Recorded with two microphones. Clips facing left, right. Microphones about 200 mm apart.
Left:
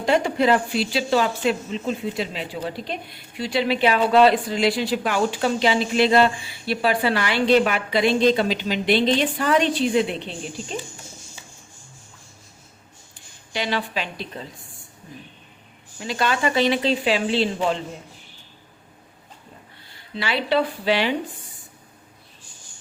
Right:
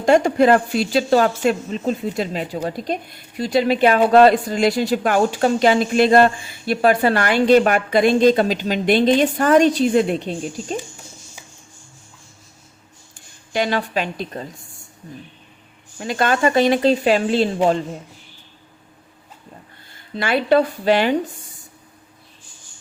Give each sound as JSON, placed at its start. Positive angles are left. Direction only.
{"t": 0.0, "sound": "speech", "side_deg": -45}
{"t": 13.5, "sound": "speech", "side_deg": -50}
{"t": 16.0, "sound": "speech", "side_deg": -50}
{"t": 20.1, "sound": "speech", "side_deg": -50}